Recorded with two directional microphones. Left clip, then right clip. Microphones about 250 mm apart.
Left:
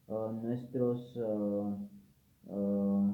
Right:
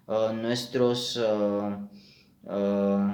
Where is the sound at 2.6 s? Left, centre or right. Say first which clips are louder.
Right 8 dB; right.